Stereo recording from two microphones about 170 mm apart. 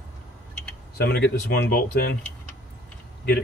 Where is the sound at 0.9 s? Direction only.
70° left (ahead or behind).